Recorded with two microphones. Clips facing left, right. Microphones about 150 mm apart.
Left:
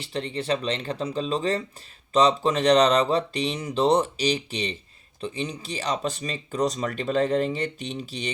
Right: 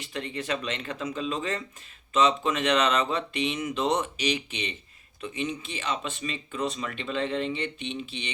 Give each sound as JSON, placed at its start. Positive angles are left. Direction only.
{"t": 0.0, "sound": "speech", "side_deg": 30}